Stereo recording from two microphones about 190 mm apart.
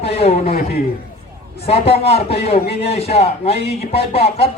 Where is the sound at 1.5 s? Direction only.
30° left (ahead or behind).